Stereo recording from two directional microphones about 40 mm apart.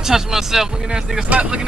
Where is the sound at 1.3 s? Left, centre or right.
Right.